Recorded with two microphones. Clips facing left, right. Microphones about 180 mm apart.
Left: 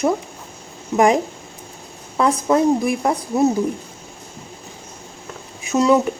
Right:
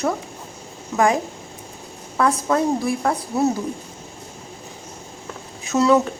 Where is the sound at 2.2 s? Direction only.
15° left (ahead or behind).